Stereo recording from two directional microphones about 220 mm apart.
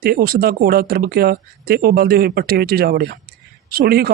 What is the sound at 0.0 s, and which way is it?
Speech, 45° right (ahead or behind).